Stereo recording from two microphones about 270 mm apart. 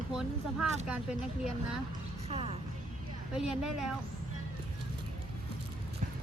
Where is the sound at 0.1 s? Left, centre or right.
Centre.